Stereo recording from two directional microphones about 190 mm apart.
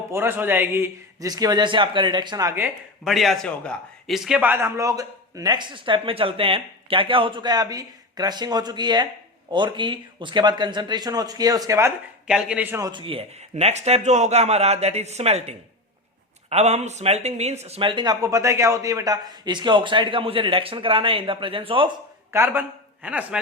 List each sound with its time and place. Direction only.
0.1 s a man's voice: 10° right (ahead or behind)
12.3 s speech: 5° right (ahead or behind)
12.9 s a man's voice: 30° right (ahead or behind)
22.3 s a man's voice: 10° right (ahead or behind)